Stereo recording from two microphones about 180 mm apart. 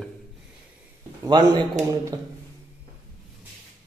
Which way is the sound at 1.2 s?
25° right (ahead or behind).